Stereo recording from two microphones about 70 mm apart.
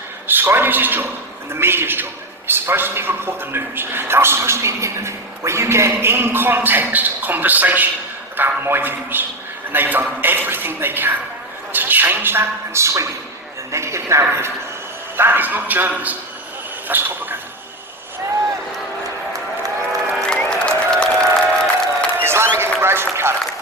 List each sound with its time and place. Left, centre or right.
0.3 s a man's voice: right
15.1 s a man's voice: right
20.3 s applause: centre
22.2 s a sound: right